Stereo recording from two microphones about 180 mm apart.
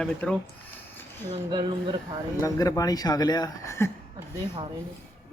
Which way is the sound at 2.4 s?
20° left (ahead or behind).